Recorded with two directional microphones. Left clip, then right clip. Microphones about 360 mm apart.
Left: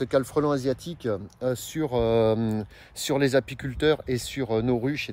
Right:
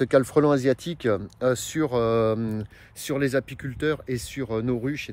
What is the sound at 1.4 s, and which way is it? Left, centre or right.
Speech, centre.